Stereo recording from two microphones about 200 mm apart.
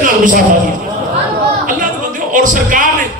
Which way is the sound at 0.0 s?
40° right (ahead or behind).